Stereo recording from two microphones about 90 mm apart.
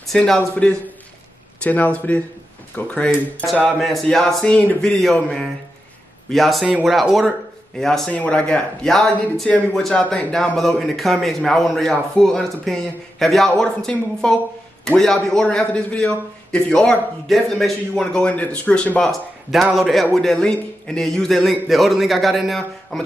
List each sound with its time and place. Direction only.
0.1 s a man's voice: 5° left (ahead or behind)
3.6 s a man's voice: centre (ahead or behind)
6.3 s a man's voice: centre (ahead or behind)
6.6 s speech: 10° right (ahead or behind)
6.9 s a man's voice: centre (ahead or behind)